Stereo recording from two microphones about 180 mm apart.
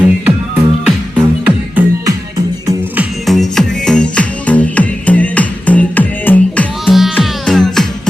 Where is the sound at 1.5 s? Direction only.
10° right (ahead or behind).